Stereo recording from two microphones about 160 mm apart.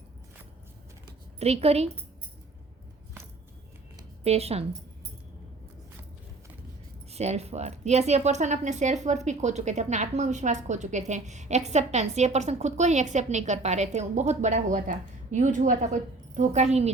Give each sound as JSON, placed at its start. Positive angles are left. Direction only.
{"t": 1.4, "sound": "a woman's voice", "side_deg": -40}
{"t": 4.2, "sound": "speech", "side_deg": -40}
{"t": 7.1, "sound": "speech", "side_deg": -40}